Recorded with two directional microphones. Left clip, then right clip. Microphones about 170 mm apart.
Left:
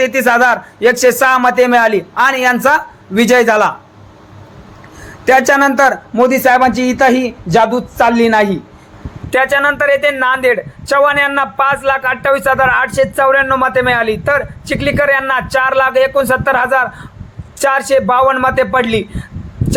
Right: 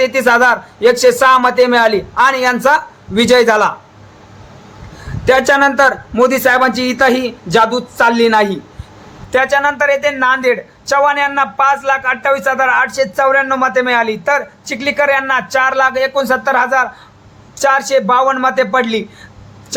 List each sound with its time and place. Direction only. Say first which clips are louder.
0.0 s speech: even; 10° left (ahead or behind)
5.2 s speech: left 1 dB; 10° left (ahead or behind)